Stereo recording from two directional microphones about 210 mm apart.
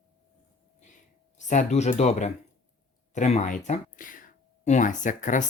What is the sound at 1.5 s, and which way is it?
Speech, 35° left (ahead or behind).